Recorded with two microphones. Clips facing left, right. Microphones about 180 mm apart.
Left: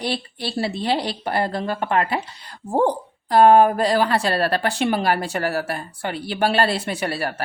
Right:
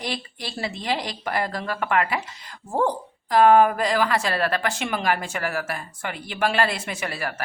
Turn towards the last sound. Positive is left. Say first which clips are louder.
# left 5 dB
turn(degrees=35)  # may be behind; listen again after turning